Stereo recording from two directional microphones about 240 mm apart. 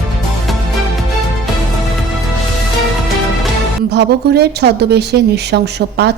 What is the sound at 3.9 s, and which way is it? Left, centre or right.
A woman's voice, right.